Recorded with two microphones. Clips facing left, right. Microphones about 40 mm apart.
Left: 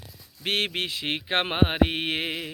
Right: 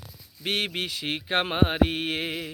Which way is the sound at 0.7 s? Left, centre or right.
Left.